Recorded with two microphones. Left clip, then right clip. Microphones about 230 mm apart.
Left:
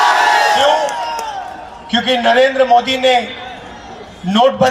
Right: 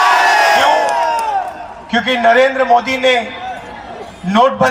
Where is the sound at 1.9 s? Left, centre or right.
Right.